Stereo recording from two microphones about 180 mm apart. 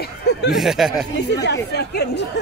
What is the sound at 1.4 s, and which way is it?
Speech, 70° left (ahead or behind).